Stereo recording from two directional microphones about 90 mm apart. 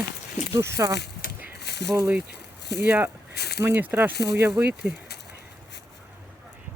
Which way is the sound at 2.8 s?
25° right (ahead or behind).